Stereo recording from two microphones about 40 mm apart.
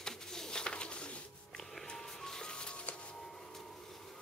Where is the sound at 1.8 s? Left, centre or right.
Centre.